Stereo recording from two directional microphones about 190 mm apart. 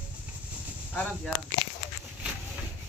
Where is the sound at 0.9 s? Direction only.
5° left (ahead or behind).